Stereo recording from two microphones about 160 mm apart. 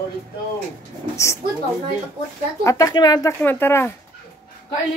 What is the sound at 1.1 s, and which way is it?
Speech, 20° left (ahead or behind).